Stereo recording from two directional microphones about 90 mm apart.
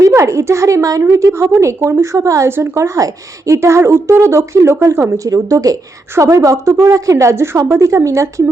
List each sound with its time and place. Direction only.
0.0 s a woman's voice: 35° right (ahead or behind)